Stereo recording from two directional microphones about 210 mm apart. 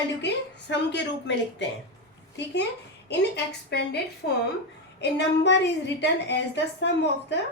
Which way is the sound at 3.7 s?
50° left (ahead or behind).